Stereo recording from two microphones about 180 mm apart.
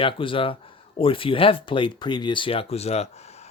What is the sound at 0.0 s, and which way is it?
Speech, 30° left (ahead or behind).